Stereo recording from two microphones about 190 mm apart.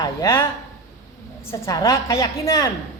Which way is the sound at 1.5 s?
15° left (ahead or behind).